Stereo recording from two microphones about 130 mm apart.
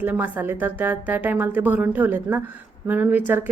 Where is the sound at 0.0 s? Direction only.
15° right (ahead or behind).